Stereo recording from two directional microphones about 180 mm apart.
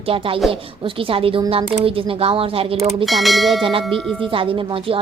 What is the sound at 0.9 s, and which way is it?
A woman's voice, 30° right (ahead or behind).